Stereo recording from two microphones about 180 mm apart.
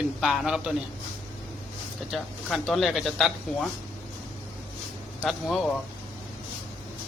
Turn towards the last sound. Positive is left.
turn(degrees=0)  # may be behind; listen again after turning